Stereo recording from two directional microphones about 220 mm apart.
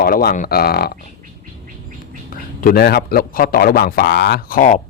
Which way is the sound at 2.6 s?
45° left (ahead or behind).